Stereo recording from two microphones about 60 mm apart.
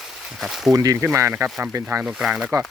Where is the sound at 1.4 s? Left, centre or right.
Right.